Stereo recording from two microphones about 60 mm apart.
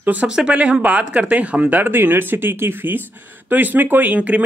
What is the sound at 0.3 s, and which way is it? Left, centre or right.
Speech, centre.